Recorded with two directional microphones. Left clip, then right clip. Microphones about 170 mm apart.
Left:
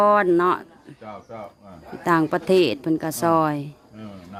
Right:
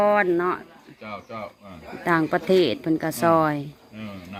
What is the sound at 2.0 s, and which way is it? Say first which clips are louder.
Speech: left 2 dB; 25° left (ahead or behind).